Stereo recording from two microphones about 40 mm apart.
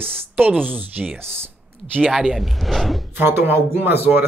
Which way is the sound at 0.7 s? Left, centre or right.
Right.